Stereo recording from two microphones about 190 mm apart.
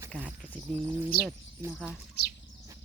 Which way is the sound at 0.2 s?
10° right (ahead or behind).